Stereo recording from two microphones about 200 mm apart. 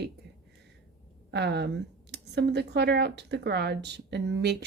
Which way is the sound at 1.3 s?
55° right (ahead or behind).